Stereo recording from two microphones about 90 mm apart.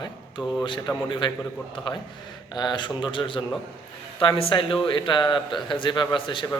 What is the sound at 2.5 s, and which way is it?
A man's voice, 55° left (ahead or behind).